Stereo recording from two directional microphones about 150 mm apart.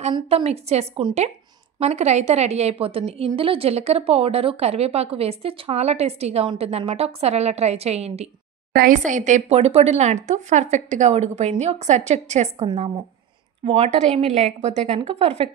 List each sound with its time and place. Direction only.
0.3 s a woman's voice: 45° right (ahead or behind)
8.7 s a woman's voice: 60° right (ahead or behind); by 15.5 s 40° right (ahead or behind)